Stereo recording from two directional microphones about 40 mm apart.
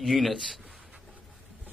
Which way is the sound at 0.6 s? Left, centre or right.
Right.